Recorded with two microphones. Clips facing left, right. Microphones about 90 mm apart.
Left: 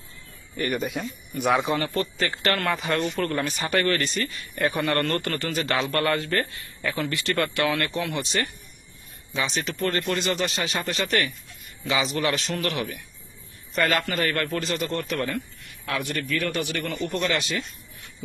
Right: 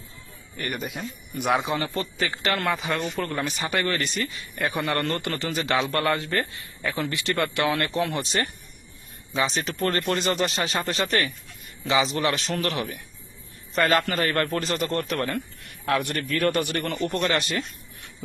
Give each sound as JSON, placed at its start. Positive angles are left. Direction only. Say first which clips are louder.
{"t": 0.5, "sound": "speech", "louder": "left 5 dB", "side_deg": 0}
{"t": 1.6, "sound": "speech", "louder": "left 2 dB", "side_deg": -15}
{"t": 2.8, "sound": "a man's voice", "louder": "left 2 dB", "side_deg": -5}
{"t": 16.0, "sound": "speech", "louder": "left 3 dB", "side_deg": -65}
{"t": 17.1, "sound": "speech", "louder": "right 1 dB", "side_deg": -40}